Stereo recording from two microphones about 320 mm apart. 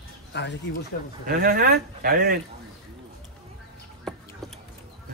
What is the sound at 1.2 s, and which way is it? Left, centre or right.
Speech, right.